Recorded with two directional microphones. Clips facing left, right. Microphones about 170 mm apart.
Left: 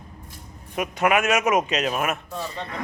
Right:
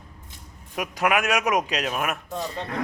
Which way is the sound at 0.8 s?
Centre (ahead or behind).